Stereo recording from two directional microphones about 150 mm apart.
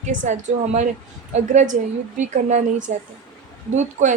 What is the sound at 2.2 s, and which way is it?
A woman's voice, 55° right (ahead or behind).